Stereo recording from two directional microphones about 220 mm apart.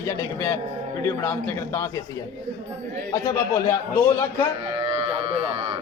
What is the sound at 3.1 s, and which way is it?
A man's voice, 15° left (ahead or behind).